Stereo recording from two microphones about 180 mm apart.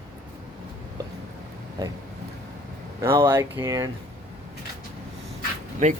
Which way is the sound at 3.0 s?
15° right (ahead or behind).